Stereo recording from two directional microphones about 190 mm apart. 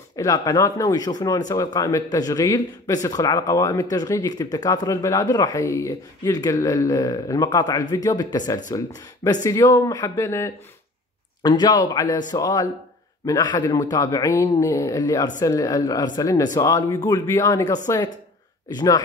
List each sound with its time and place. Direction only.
0.1 s a man's voice: 20° left (ahead or behind)